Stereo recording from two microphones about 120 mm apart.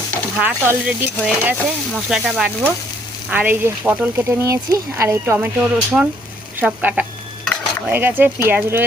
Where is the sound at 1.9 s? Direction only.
5° right (ahead or behind); by 5.3 s 25° right (ahead or behind).